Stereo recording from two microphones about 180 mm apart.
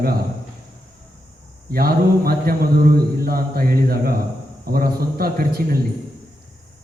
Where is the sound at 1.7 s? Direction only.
55° right (ahead or behind).